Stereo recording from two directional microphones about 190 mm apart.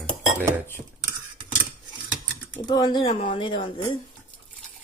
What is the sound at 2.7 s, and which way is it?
Speech, 25° left (ahead or behind).